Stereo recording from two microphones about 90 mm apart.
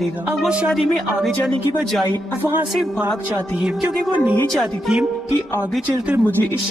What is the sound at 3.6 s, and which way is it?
Speech, 15° right (ahead or behind).